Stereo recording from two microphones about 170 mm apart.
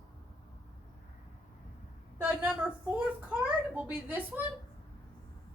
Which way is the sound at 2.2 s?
10° right (ahead or behind).